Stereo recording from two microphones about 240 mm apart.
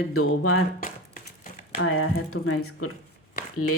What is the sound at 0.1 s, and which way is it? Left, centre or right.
Speech, left.